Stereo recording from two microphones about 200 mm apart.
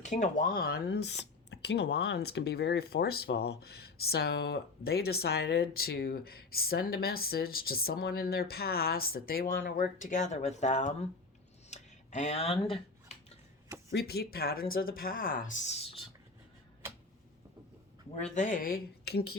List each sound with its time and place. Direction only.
0.0 s speech: 40° left (ahead or behind)
11.7 s a sound: 35° left (ahead or behind)
13.9 s speech: 50° left (ahead or behind); by 16.0 s 30° left (ahead or behind)
18.1 s speech: 35° left (ahead or behind)